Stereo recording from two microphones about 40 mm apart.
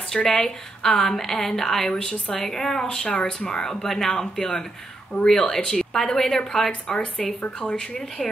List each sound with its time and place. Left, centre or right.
0.1 s speech: centre
1.8 s a woman's voice: left
2.3 s speech: centre
5.1 s speech: left
5.5 s speech: centre
6.9 s a woman's voice: left